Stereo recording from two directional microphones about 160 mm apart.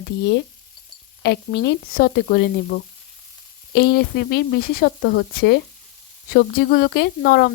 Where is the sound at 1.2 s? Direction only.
90° left.